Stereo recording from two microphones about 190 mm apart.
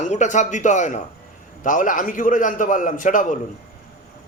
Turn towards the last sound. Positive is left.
turn(degrees=45)  # may be behind; listen again after turning